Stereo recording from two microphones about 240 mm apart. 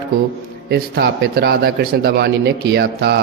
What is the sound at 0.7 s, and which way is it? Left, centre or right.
A man's voice, right.